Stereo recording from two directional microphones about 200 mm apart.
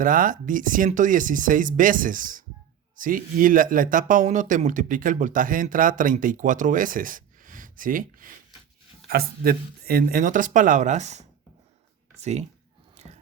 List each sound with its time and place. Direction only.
0.0 s speech: 45° right (ahead or behind)